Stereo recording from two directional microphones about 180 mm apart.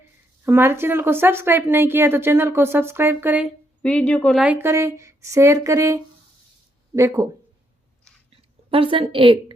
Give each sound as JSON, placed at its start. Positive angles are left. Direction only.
{"t": 0.4, "sound": "a woman's voice", "side_deg": -10}
{"t": 3.8, "sound": "a woman's voice", "side_deg": 5}
{"t": 4.4, "sound": "a woman's voice", "side_deg": -15}
{"t": 8.1, "sound": "a sound", "side_deg": 5}
{"t": 8.7, "sound": "a woman's voice", "side_deg": -30}